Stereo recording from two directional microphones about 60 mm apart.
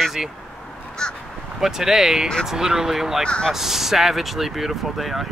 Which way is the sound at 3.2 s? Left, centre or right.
Centre.